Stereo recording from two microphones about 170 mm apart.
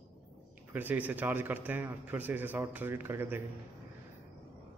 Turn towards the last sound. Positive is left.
turn(degrees=-10)  # may be behind; listen again after turning